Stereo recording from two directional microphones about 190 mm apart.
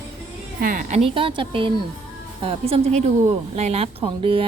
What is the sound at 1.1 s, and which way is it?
A woman's voice, 30° right (ahead or behind).